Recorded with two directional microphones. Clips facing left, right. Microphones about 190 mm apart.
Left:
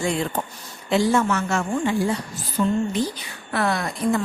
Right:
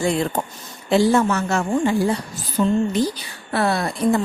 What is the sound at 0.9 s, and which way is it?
A woman's voice, 35° right (ahead or behind).